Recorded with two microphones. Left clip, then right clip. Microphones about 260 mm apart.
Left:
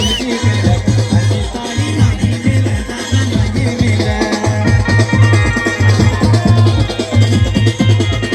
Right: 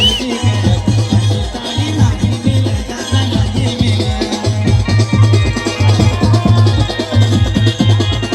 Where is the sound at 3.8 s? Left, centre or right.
Centre.